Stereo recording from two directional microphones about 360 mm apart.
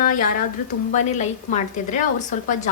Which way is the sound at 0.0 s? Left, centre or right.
Left.